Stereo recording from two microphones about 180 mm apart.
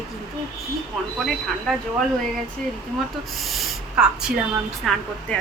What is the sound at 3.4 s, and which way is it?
A woman's voice, centre (ahead or behind).